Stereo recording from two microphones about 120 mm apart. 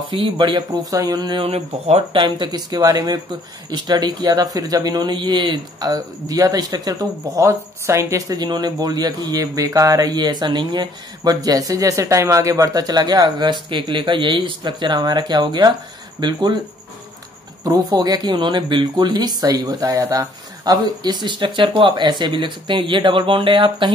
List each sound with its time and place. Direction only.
0.1 s a man's voice: 45° right (ahead or behind)
2.2 s a man's voice: 40° right (ahead or behind)
17.6 s a man's voice: 30° right (ahead or behind)